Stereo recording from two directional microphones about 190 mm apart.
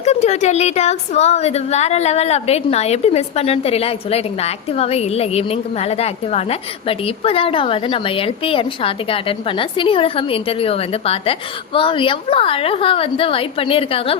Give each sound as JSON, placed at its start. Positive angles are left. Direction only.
{"t": 0.0, "sound": "a woman's voice", "side_deg": 35}